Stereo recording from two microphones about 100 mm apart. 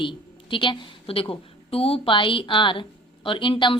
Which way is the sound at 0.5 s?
55° left (ahead or behind).